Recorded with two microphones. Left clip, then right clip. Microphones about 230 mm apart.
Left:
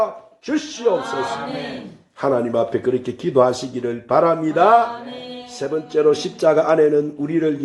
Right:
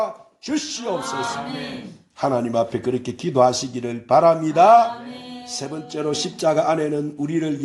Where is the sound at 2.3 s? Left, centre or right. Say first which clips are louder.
Left 4 dB; right.